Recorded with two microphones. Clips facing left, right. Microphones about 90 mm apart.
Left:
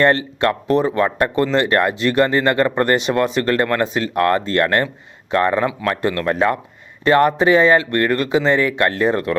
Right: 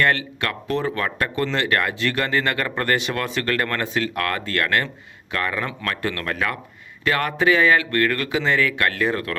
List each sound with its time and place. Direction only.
0.0 s speech: 30° left (ahead or behind)